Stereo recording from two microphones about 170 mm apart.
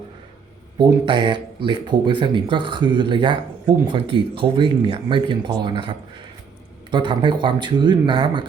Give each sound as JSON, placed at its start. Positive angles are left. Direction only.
{"t": 0.8, "sound": "speech", "side_deg": -30}
{"t": 6.9, "sound": "speech", "side_deg": -30}